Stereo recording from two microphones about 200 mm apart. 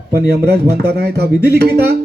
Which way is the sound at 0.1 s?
55° right (ahead or behind).